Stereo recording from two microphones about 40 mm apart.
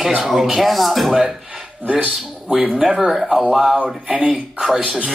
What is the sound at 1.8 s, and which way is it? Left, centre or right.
Speech, right.